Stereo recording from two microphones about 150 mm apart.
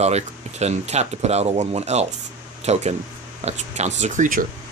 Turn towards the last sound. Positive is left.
turn(degrees=-55)  # may be behind; listen again after turning